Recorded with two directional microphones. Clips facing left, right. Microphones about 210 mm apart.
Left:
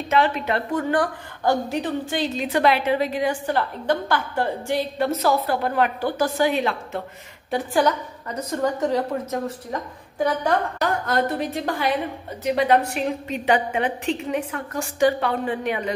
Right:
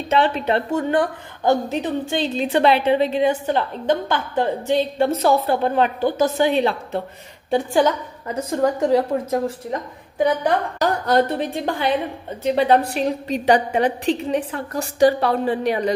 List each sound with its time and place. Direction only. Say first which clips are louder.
0.1 s a woman's voice: right 3 dB; 30° right (ahead or behind)
10.1 s a woman's voice: right 4 dB; 20° right (ahead or behind)
10.8 s a woman's voice: right 4 dB; 35° right (ahead or behind)